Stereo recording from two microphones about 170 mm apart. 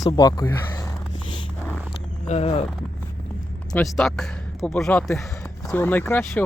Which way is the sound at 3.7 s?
Centre (ahead or behind).